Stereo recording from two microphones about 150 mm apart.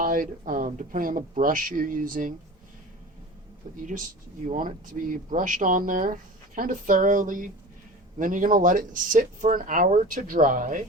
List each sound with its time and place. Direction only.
0.0 s speech: 65° right (ahead or behind)
4.5 s speech: 65° right (ahead or behind)